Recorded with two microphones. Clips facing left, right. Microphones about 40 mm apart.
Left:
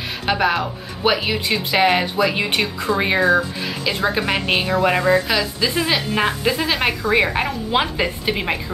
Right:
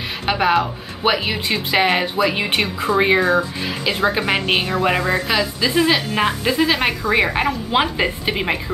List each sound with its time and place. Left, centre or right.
0.3 s speech: centre
2.5 s a woman's voice: centre
2.9 s speech: centre